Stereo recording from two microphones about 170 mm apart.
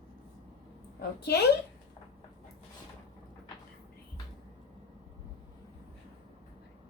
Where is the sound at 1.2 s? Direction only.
75° left (ahead or behind).